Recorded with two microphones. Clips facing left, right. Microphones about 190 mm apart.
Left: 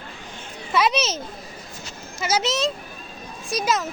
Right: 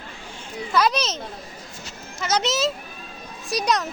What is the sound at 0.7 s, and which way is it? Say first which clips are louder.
Speech: even; centre (ahead or behind).